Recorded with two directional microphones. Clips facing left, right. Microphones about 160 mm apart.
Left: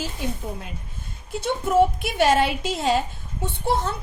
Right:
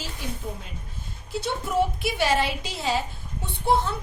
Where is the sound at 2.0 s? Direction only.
50° left (ahead or behind).